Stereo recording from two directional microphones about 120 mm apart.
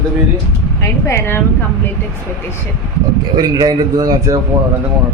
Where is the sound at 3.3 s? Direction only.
35° right (ahead or behind).